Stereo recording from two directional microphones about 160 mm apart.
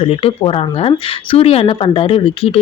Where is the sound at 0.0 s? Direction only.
35° left (ahead or behind).